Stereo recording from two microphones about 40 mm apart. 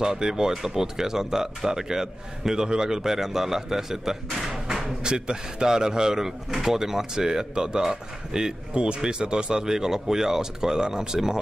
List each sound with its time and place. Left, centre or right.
0.0 s speech: centre
4.6 s a sound: centre
5.0 s speech: right